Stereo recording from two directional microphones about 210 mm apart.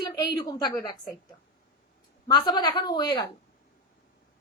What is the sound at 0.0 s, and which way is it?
Speech, 20° left (ahead or behind).